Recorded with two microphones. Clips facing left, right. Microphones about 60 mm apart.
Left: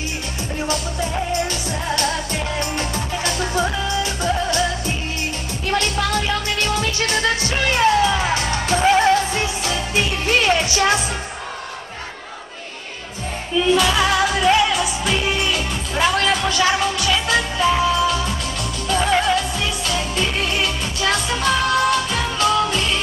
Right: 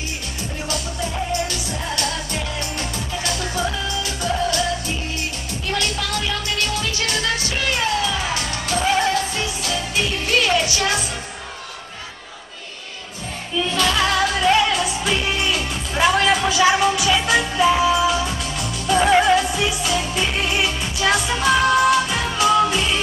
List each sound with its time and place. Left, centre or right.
1.5 s music: left
5.7 s music: left
13.7 s music: centre